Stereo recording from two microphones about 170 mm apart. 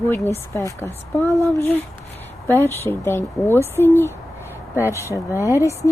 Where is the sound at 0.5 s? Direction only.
15° left (ahead or behind).